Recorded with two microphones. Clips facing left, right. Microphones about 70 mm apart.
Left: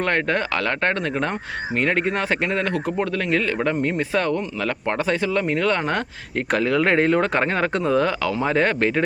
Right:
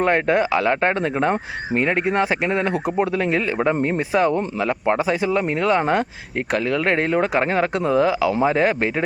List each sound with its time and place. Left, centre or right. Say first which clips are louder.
0.0 s speech: right 4 dB; centre